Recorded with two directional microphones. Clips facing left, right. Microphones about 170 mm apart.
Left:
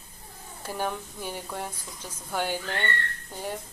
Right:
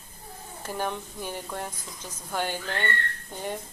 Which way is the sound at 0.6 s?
10° left (ahead or behind).